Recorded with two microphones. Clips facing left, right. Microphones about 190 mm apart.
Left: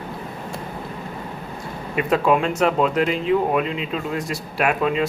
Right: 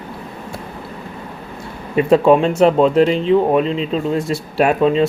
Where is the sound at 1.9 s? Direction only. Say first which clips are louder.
Right 7 dB; 30° right (ahead or behind).